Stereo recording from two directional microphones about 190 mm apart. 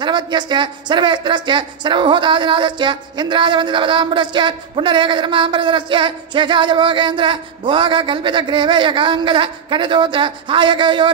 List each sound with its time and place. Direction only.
0.0 s speech: 25° right (ahead or behind)